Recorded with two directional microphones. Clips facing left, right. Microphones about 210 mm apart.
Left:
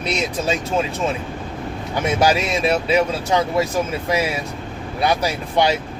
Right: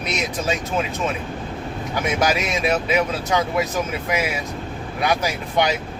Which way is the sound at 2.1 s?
30° left (ahead or behind).